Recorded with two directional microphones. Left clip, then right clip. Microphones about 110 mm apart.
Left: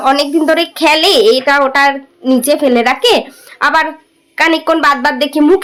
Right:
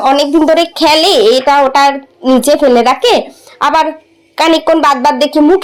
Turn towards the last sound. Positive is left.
turn(degrees=-15)  # may be behind; listen again after turning